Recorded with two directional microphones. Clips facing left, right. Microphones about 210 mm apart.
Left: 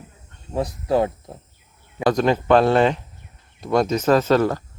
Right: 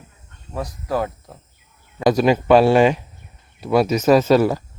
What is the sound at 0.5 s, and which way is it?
Speech, 25° left (ahead or behind).